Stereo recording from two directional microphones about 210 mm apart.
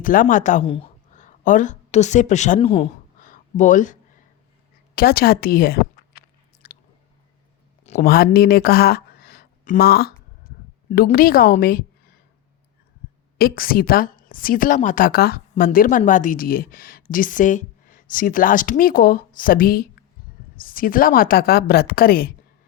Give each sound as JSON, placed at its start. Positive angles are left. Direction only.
{"t": 0.0, "sound": "speech", "side_deg": 40}
{"t": 3.2, "sound": "a sound", "side_deg": 40}
{"t": 4.9, "sound": "chewing", "side_deg": 45}
{"t": 8.0, "sound": "speech", "side_deg": 45}
{"t": 13.4, "sound": "speech", "side_deg": 45}